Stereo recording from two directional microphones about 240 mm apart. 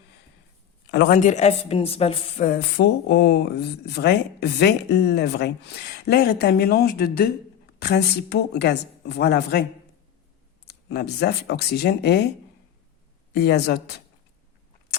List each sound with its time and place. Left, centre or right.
0.9 s a woman's voice: left
10.7 s a woman's voice: left
13.3 s a woman's voice: left